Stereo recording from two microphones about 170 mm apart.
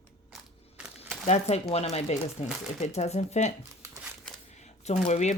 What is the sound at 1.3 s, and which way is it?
Speech, 40° left (ahead or behind).